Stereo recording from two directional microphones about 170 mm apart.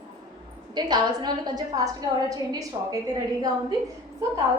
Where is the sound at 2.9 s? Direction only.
20° right (ahead or behind).